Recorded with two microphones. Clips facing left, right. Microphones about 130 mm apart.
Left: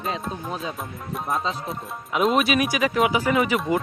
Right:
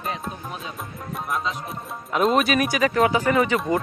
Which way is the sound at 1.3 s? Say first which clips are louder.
Left 2 dB; 30° left (ahead or behind).